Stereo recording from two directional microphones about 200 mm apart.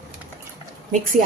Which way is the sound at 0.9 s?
40° right (ahead or behind).